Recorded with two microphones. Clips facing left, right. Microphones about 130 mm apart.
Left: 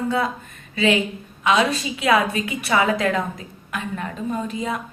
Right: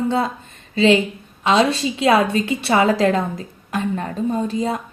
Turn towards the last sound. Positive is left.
turn(degrees=-35)  # may be behind; listen again after turning